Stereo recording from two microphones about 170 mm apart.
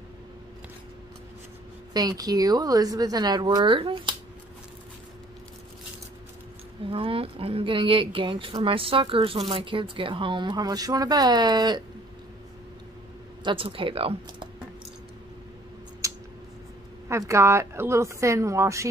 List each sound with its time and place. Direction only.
2.0 s speech: 20° right (ahead or behind)
6.9 s speech: 35° right (ahead or behind)
13.4 s speech: 30° right (ahead or behind)
16.0 s a sound: 20° right (ahead or behind)
17.3 s speech: 15° right (ahead or behind)